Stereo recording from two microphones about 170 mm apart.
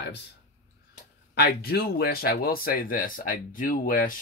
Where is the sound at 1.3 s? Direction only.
65° left (ahead or behind).